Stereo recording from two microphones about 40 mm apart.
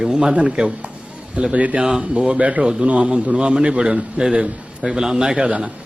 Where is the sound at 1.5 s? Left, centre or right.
Right.